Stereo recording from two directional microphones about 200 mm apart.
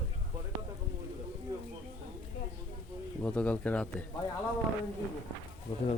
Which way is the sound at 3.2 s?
5° left (ahead or behind).